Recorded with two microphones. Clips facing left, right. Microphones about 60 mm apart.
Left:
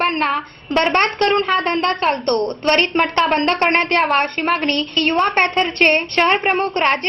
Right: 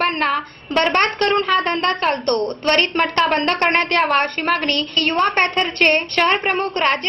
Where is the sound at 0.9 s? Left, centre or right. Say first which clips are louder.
Left 2 dB; left.